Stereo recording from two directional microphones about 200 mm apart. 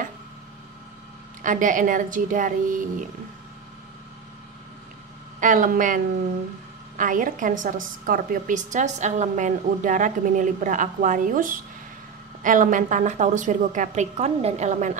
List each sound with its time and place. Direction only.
1.4 s a woman's voice: 40° right (ahead or behind)
5.4 s a woman's voice: 40° right (ahead or behind)